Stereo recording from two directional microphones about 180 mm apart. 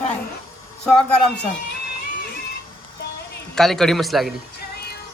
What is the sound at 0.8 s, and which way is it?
Speech, 5° left (ahead or behind).